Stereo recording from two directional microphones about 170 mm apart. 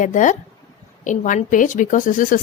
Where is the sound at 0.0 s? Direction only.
50° left (ahead or behind).